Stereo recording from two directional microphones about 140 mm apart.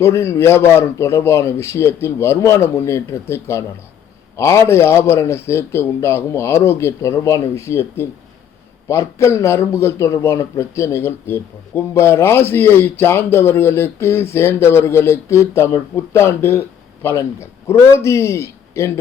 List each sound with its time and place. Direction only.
0.0 s speech: 20° left (ahead or behind)